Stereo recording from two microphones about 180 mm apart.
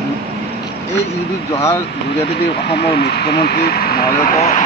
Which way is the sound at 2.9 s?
65° left (ahead or behind).